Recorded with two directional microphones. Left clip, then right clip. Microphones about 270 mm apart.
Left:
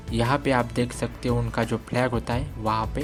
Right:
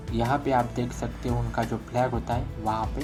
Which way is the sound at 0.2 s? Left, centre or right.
Left.